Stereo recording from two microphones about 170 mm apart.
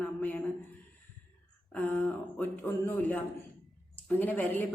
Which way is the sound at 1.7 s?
10° left (ahead or behind).